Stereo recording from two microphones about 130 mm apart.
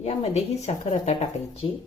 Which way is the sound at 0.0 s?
55° left (ahead or behind).